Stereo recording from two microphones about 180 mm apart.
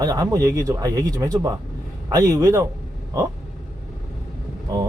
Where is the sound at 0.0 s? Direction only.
20° right (ahead or behind).